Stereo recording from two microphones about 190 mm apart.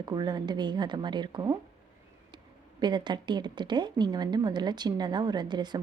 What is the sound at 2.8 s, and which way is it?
A woman's voice, 25° right (ahead or behind).